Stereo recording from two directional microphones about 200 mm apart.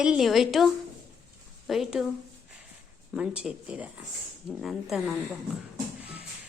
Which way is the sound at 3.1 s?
5° right (ahead or behind).